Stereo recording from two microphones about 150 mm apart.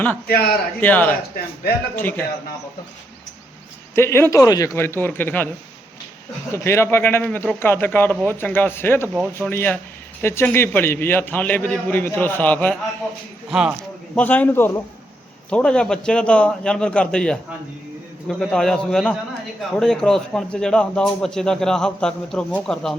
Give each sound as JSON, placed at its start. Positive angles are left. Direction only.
{"t": 0.3, "sound": "a man's voice", "side_deg": 90}
{"t": 0.8, "sound": "a man's voice", "side_deg": 10}
{"t": 3.9, "sound": "a man's voice", "side_deg": 15}
{"t": 6.5, "sound": "a man's voice", "side_deg": 15}
{"t": 13.5, "sound": "a man's voice", "side_deg": -5}
{"t": 14.2, "sound": "a man's voice", "side_deg": 10}